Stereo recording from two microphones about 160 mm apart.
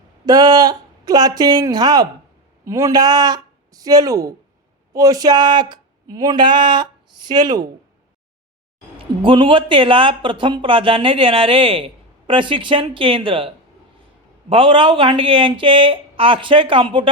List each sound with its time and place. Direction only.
0.3 s speech: 25° right (ahead or behind)
9.2 s speech: 30° right (ahead or behind)
14.5 s speech: 30° right (ahead or behind)